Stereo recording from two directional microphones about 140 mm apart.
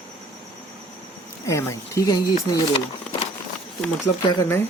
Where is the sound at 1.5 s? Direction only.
20° left (ahead or behind).